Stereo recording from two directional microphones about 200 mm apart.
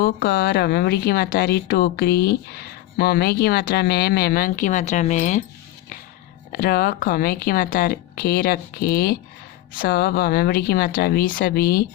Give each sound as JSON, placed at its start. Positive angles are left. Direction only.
{"t": 0.0, "sound": "speech", "side_deg": 50}
{"t": 6.5, "sound": "speech", "side_deg": 50}